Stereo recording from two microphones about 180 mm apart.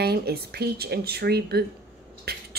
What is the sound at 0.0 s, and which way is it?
Speech, 60° right (ahead or behind).